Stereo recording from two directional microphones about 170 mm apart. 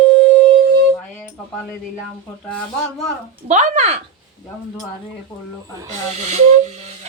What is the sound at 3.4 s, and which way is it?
Speech, 45° right (ahead or behind).